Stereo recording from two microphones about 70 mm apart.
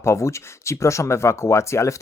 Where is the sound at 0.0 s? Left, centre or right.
Left.